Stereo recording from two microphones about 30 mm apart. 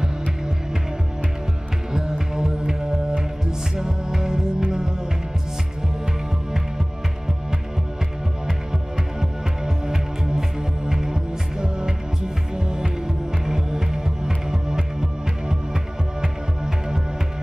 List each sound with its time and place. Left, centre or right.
1.9 s music: right
10.9 s music: right